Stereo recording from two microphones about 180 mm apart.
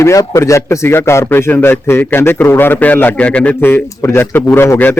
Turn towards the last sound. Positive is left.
turn(degrees=10)  # may be behind; listen again after turning